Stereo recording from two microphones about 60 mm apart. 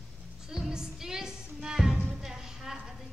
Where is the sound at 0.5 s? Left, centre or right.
Centre.